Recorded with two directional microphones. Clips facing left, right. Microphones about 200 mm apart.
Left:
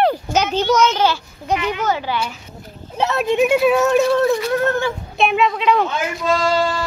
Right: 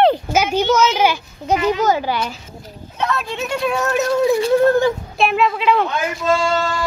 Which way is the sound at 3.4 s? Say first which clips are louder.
Left 7 dB; 5° left (ahead or behind).